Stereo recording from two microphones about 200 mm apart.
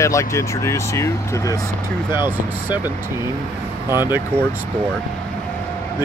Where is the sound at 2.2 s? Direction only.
10° right (ahead or behind).